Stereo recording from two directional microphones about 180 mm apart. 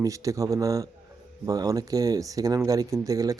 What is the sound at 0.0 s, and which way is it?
Speech, 20° right (ahead or behind).